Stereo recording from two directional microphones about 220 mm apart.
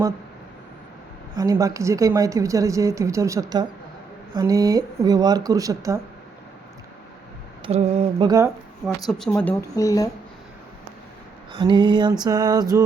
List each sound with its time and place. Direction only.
1.4 s speech: 15° right (ahead or behind)
7.6 s mantra: 30° right (ahead or behind)
9.0 s speech: centre (ahead or behind)
11.5 s mantra: 20° right (ahead or behind)